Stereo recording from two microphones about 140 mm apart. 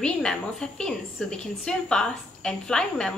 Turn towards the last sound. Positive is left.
turn(degrees=5)  # may be behind; listen again after turning